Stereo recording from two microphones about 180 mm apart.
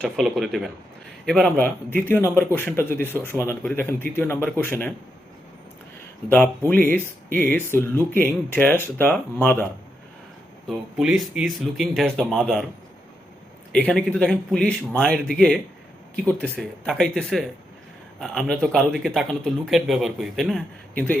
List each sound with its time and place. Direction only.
0.0 s a man's voice: centre (ahead or behind)
6.9 s speech: 10° left (ahead or behind)
10.7 s a man's voice: centre (ahead or behind)
13.7 s a man's voice: 10° left (ahead or behind)